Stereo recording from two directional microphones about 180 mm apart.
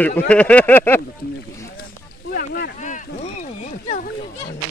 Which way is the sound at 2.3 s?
60° left (ahead or behind).